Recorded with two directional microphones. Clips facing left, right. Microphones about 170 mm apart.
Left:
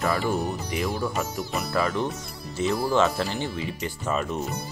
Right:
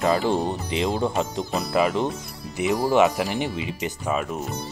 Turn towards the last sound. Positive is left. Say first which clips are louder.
# right 2 dB
turn(degrees=-15)  # may be behind; listen again after turning